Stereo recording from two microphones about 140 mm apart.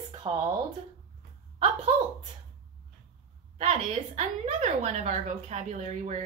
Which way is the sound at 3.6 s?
50° right (ahead or behind).